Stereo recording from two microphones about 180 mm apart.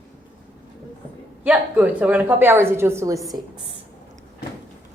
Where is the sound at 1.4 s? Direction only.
10° right (ahead or behind).